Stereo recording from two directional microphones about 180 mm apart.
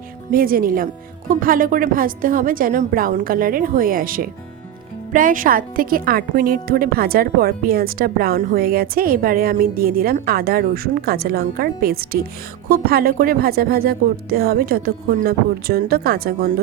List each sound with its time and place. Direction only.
0.3 s a woman's voice: 50° right (ahead or behind)